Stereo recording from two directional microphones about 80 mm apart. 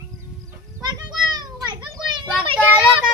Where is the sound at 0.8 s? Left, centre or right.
Right.